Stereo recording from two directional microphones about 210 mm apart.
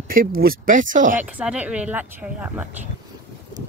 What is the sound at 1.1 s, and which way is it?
Speech, 5° right (ahead or behind).